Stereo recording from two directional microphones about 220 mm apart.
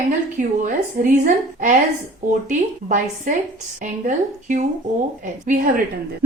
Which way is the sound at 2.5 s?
35° right (ahead or behind).